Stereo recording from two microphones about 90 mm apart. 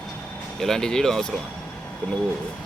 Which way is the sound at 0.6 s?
5° left (ahead or behind).